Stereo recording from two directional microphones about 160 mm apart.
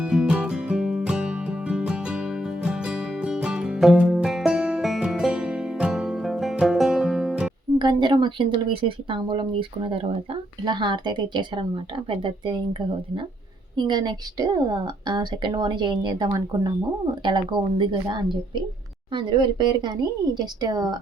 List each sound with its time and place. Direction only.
0.0 s music: 5° right (ahead or behind)
7.8 s a woman's voice: 30° right (ahead or behind)
13.7 s a woman's voice: 30° right (ahead or behind)